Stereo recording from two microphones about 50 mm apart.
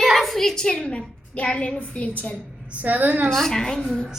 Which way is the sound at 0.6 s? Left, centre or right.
Left.